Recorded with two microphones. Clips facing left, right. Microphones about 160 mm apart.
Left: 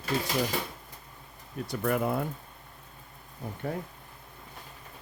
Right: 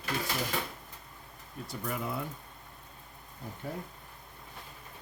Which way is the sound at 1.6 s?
65° left (ahead or behind).